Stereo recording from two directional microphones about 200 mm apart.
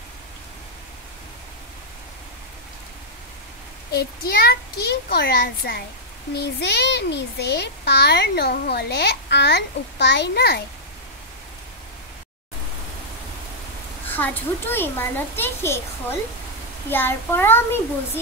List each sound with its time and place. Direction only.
3.9 s a child's voice: 50° left (ahead or behind)
14.0 s a child's voice: 10° left (ahead or behind)